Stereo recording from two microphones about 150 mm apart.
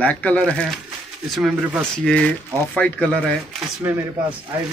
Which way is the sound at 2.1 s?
5° left (ahead or behind).